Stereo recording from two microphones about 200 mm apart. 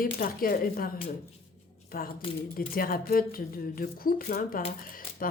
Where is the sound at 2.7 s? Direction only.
45° left (ahead or behind).